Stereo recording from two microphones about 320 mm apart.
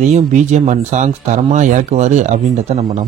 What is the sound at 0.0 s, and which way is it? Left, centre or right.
Speech, right.